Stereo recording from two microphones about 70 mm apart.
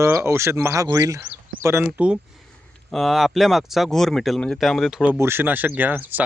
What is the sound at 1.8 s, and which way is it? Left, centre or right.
Speech, right.